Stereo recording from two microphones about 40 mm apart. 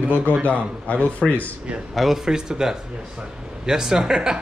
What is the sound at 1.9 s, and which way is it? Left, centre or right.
Speech, centre.